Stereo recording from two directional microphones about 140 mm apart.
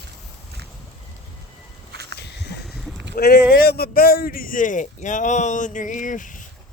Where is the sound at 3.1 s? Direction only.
90° left; by 6.3 s 65° left (ahead or behind).